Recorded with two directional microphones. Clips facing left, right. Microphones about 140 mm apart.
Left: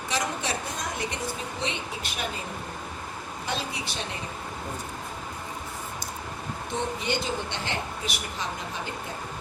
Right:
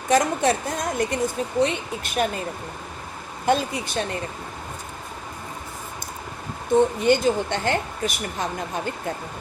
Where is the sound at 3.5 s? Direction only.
50° right (ahead or behind).